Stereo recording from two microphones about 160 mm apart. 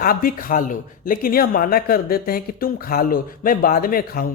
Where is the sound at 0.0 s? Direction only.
65° left (ahead or behind).